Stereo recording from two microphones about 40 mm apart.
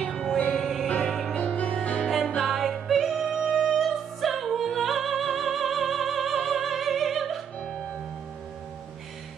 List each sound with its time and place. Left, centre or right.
0.0 s music: centre
0.5 s music: centre
0.9 s music: centre
1.3 s music: left
2.2 s music: centre